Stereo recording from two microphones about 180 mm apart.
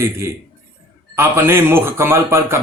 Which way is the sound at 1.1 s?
15° right (ahead or behind).